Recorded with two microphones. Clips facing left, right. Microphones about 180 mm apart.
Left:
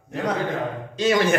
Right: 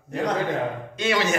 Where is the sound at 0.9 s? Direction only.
35° left (ahead or behind).